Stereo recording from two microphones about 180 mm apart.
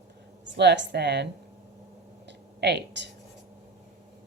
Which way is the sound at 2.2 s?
70° right (ahead or behind).